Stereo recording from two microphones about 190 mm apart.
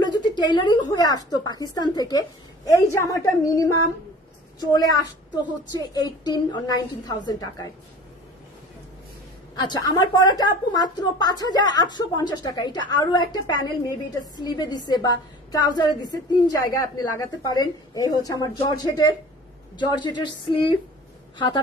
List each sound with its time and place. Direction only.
0.0 s speech: 25° left (ahead or behind)
9.6 s speech: 20° left (ahead or behind)